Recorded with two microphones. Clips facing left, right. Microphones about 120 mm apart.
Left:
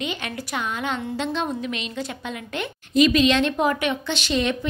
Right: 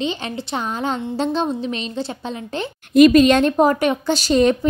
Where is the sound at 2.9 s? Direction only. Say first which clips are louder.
Right 7 dB; 50° right (ahead or behind).